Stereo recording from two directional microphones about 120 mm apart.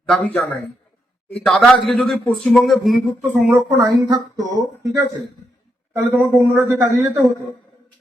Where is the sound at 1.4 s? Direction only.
Centre (ahead or behind).